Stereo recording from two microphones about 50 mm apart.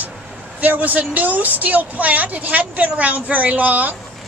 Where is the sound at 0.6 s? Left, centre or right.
Right.